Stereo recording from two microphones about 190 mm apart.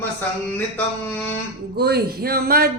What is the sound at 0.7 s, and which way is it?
Mantra, 5° left (ahead or behind).